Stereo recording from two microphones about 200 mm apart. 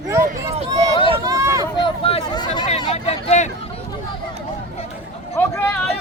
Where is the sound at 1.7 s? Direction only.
25° left (ahead or behind).